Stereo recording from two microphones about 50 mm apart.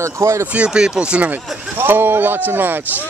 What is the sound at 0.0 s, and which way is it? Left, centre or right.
Speech, right.